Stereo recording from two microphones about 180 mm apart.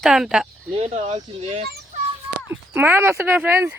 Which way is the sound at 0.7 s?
40° right (ahead or behind).